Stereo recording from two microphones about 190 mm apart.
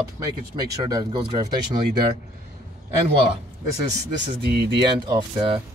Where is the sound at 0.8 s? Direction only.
20° right (ahead or behind).